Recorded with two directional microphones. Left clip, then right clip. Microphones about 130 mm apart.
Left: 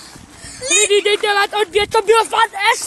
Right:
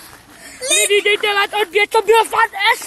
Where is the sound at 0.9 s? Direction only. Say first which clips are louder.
Right 1 dB; 20° left (ahead or behind).